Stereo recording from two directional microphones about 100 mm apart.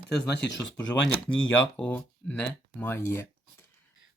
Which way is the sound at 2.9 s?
25° left (ahead or behind).